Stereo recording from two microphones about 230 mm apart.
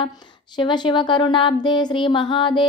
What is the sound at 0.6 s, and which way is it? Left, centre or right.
Speech, left.